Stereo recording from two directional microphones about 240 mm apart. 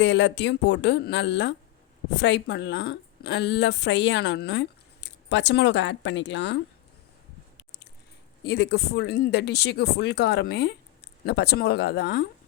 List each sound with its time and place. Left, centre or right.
0.0 s a woman's voice: left
8.4 s a woman's voice: left